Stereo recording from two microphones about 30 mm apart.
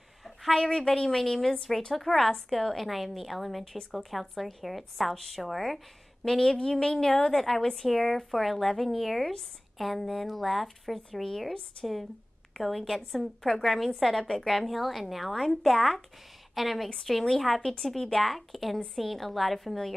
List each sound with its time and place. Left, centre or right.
0.2 s a sound: centre
0.7 s a woman's voice: centre
6.6 s a woman's voice: left
13.7 s speech: centre
17.6 s a woman's voice: centre
18.2 s speech: centre